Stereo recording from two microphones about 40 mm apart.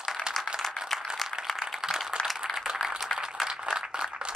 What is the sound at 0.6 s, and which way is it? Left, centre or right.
Rattle, centre.